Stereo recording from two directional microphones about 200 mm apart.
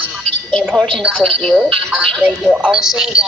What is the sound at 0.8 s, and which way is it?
A man's voice, centre (ahead or behind).